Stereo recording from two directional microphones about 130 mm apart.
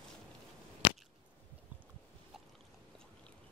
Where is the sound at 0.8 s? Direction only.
45° left (ahead or behind).